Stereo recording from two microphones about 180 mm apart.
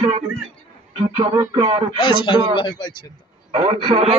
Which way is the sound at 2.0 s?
30° left (ahead or behind).